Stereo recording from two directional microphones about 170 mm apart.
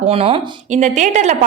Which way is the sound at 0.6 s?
45° right (ahead or behind).